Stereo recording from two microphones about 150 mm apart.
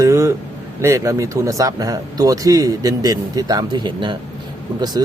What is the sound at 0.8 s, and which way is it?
Speech, 20° right (ahead or behind).